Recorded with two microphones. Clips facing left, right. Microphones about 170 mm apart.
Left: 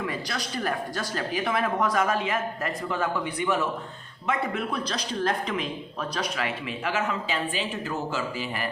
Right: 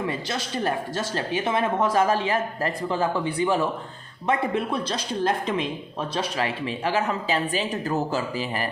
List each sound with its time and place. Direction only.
0.1 s speech: 25° right (ahead or behind)